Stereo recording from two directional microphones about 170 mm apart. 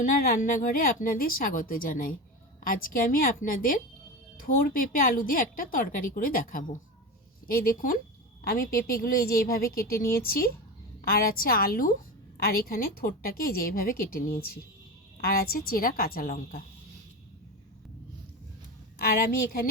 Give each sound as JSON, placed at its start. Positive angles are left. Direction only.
{"t": 0.0, "sound": "a woman's voice", "side_deg": 55}
{"t": 18.9, "sound": "a woman's voice", "side_deg": 60}